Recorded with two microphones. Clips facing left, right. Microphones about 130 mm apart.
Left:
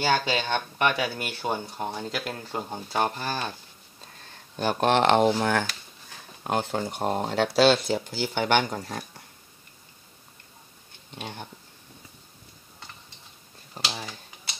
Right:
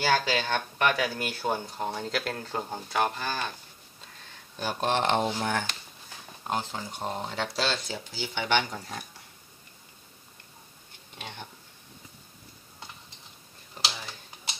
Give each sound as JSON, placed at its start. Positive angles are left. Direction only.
{"t": 0.0, "sound": "speech", "side_deg": 20}
{"t": 2.9, "sound": "speech", "side_deg": 30}
{"t": 4.6, "sound": "speech", "side_deg": 60}
{"t": 6.4, "sound": "speech", "side_deg": 65}
{"t": 11.1, "sound": "speech", "side_deg": 40}
{"t": 13.8, "sound": "speech", "side_deg": 35}